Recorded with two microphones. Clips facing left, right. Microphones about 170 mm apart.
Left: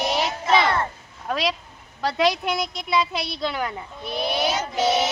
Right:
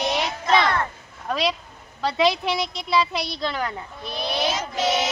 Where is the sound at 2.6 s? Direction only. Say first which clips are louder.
Even; 45° left (ahead or behind).